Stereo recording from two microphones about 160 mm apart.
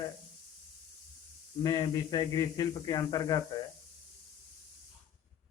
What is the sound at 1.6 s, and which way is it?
A man's voice, 25° left (ahead or behind).